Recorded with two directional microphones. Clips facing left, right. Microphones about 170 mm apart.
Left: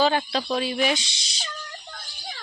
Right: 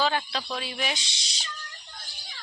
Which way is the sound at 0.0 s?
35° left (ahead or behind).